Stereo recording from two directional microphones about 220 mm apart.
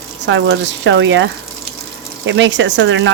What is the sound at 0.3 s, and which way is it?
Speech, 55° right (ahead or behind).